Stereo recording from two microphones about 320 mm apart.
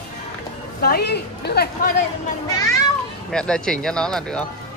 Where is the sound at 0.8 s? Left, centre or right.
Left.